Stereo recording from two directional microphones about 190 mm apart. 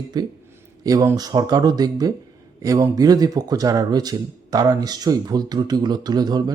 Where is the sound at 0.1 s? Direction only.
20° right (ahead or behind).